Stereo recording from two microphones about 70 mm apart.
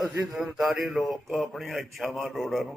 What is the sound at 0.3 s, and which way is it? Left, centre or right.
Speech, centre.